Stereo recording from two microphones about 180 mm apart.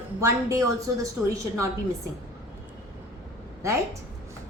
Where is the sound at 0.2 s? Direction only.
15° right (ahead or behind).